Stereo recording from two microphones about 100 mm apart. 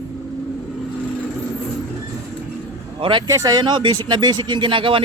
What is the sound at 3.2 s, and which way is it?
Speech, 35° right (ahead or behind).